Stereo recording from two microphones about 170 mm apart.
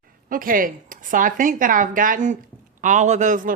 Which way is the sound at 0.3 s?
55° right (ahead or behind).